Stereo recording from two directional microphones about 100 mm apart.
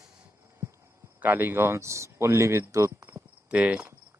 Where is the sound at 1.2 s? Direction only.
20° right (ahead or behind).